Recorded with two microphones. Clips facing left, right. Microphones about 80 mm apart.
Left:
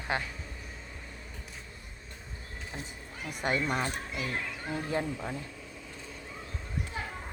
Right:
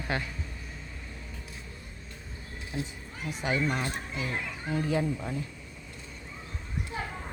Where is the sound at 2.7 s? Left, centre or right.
Left.